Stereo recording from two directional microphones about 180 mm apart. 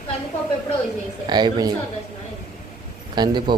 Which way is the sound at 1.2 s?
25° right (ahead or behind).